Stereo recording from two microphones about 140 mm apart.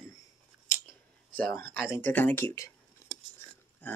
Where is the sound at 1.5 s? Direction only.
15° left (ahead or behind).